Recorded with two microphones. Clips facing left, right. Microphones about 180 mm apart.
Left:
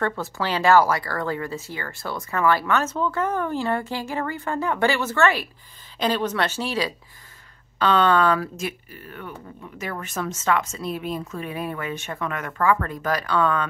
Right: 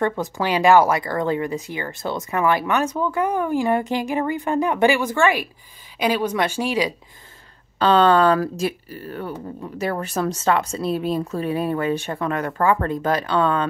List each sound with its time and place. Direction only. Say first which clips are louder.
0.0 s speech: right 4 dB; 15° right (ahead or behind)
7.8 s speech: right 4 dB; 35° right (ahead or behind)